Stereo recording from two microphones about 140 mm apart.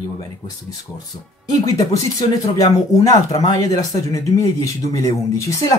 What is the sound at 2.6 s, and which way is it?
Speech, 25° left (ahead or behind).